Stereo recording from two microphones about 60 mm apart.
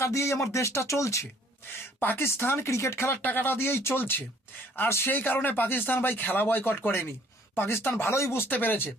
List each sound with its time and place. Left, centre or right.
0.0 s speech: left
2.0 s speech: left
8.4 s speech: left